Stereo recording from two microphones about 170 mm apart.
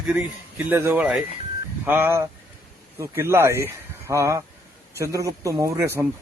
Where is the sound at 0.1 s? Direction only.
5° right (ahead or behind).